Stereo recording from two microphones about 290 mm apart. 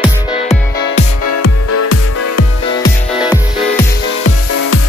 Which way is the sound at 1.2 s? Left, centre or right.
Left.